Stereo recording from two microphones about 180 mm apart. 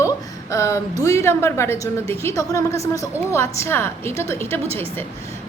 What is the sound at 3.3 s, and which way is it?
A woman's voice, 15° left (ahead or behind).